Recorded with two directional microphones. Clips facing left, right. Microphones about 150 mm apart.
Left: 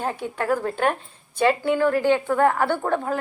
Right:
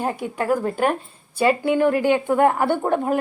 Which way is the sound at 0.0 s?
10° right (ahead or behind).